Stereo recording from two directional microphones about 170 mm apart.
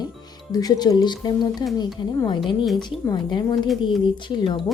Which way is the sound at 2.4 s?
Centre (ahead or behind).